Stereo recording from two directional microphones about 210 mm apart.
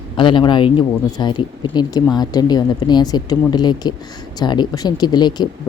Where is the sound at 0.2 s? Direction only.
20° left (ahead or behind).